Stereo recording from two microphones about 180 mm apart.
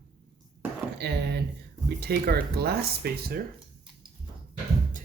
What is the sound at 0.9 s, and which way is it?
Speech, 65° right (ahead or behind).